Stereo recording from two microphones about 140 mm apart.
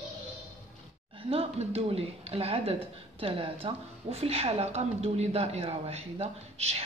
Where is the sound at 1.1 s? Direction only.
45° right (ahead or behind).